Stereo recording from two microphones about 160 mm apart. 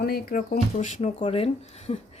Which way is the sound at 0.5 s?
50° left (ahead or behind).